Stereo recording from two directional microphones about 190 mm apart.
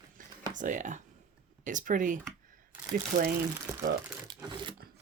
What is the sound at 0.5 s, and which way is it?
Speech, 40° right (ahead or behind).